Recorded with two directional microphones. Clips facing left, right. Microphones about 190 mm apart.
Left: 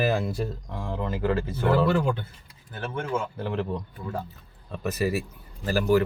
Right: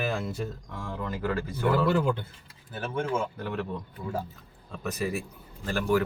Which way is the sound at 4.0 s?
Centre (ahead or behind).